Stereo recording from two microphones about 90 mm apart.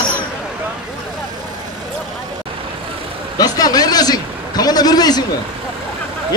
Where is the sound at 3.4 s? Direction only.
45° left (ahead or behind).